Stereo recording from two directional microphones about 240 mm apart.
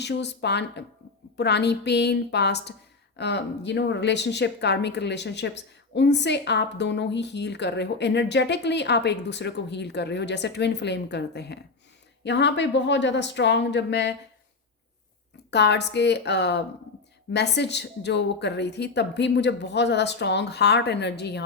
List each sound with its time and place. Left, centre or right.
0.0 s speech: left
15.4 s speech: left